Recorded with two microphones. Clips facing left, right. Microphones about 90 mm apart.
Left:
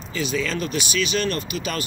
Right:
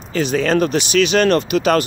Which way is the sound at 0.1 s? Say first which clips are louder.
Right 9 dB; 55° right (ahead or behind).